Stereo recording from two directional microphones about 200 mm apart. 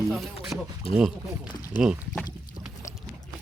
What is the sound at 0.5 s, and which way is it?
Speech, 15° right (ahead or behind).